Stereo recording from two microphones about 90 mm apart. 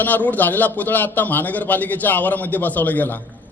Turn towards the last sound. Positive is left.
turn(degrees=20)  # may be behind; listen again after turning